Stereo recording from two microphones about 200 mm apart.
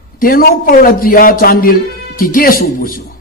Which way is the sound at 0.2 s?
45° left (ahead or behind).